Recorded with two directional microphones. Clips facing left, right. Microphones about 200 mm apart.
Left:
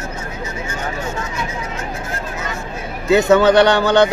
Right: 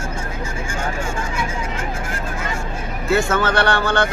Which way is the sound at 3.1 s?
20° left (ahead or behind).